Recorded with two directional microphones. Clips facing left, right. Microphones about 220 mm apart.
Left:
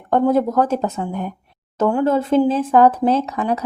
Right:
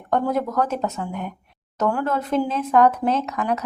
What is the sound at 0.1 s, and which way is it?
Speech, 30° left (ahead or behind).